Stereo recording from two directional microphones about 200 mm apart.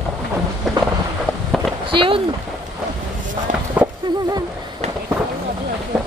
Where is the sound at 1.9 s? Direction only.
25° right (ahead or behind).